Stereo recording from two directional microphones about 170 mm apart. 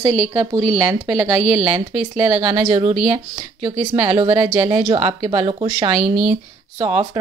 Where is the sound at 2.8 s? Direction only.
40° right (ahead or behind).